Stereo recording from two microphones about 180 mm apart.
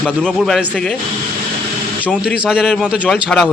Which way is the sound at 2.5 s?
5° right (ahead or behind).